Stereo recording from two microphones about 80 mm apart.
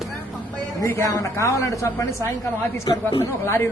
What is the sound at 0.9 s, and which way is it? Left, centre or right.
Speech, left.